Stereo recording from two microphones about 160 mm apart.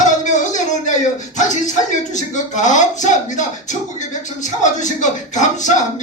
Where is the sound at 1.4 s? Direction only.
50° left (ahead or behind).